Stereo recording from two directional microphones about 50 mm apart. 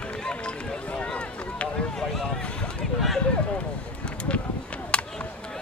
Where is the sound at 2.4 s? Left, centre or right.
Centre.